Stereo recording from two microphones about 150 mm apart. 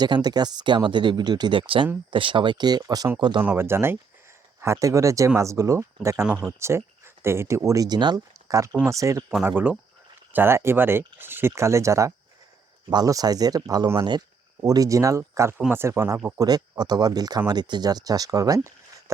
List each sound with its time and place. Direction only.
0.0 s speech: 25° right (ahead or behind)
3.4 s speech: 15° right (ahead or behind)
6.2 s speech: 5° right (ahead or behind)
6.6 s speech: 20° right (ahead or behind)